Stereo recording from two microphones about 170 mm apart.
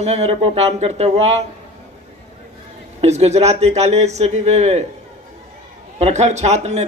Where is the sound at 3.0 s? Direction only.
40° right (ahead or behind).